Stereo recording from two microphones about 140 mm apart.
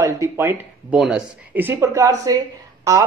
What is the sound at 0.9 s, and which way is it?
A woman's voice, 5° right (ahead or behind).